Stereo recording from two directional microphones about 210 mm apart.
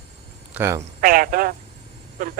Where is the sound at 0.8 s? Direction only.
40° right (ahead or behind).